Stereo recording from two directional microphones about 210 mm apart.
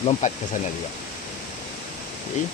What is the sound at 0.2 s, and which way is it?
Speech, 35° left (ahead or behind).